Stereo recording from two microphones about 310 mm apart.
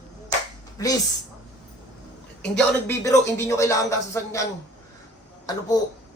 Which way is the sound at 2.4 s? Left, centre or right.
Centre.